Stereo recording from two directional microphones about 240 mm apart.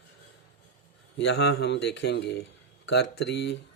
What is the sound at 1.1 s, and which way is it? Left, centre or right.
Speech, left.